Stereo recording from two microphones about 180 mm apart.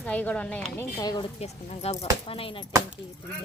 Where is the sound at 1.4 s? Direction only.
35° left (ahead or behind).